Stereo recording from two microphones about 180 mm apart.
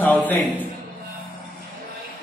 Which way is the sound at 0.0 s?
10° left (ahead or behind).